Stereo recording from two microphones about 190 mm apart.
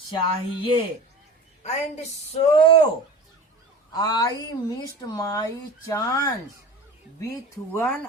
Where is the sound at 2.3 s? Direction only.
30° left (ahead or behind).